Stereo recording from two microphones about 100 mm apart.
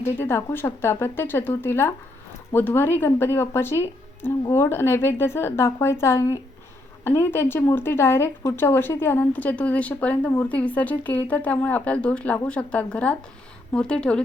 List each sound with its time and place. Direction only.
0.2 s a woman's voice: 20° left (ahead or behind)